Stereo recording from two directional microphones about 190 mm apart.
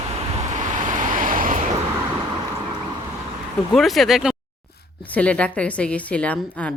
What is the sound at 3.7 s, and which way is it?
A woman's voice, centre (ahead or behind).